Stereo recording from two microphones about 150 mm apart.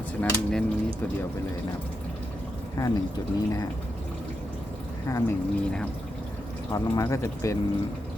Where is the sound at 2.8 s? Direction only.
30° left (ahead or behind).